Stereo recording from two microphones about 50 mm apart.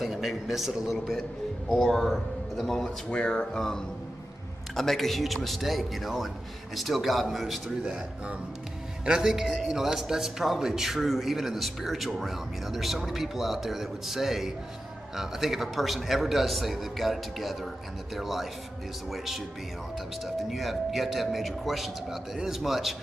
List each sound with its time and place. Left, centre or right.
0.0 s a man's voice: centre
3.1 s a man's voice: centre
7.8 s a man's voice: centre
20.3 s a man's voice: centre